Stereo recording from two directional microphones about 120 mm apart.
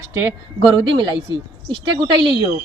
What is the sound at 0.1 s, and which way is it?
Speech, 25° right (ahead or behind).